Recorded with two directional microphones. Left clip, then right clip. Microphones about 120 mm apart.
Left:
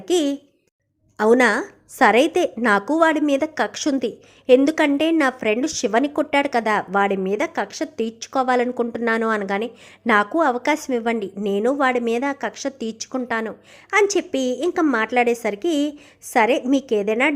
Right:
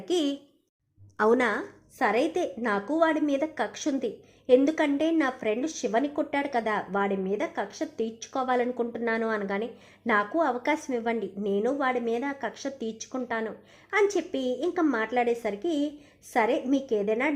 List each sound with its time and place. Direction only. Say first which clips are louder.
0.0 s a woman's voice: left 7 dB; 40° left (ahead or behind)
1.1 s a woman's voice: left 7 dB; 30° left (ahead or behind)
1.4 s a woman's voice: left 9 dB; 45° left (ahead or behind)
3.1 s a woman's voice: left 7 dB; 30° left (ahead or behind)